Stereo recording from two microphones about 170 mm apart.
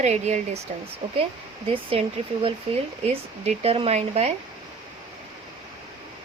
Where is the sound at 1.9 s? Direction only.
35° right (ahead or behind).